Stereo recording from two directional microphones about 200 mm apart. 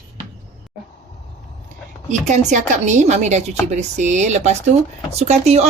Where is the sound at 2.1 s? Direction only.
35° right (ahead or behind).